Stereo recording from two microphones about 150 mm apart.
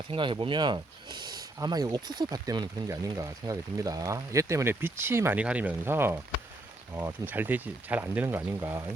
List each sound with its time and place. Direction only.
0.1 s speech: 35° right (ahead or behind); by 8.8 s 15° right (ahead or behind)